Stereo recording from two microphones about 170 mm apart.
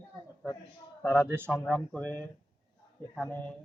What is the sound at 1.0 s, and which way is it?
Speech, 10° left (ahead or behind).